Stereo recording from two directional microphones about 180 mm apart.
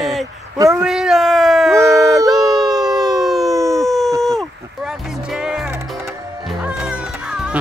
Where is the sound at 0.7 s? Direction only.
5° right (ahead or behind).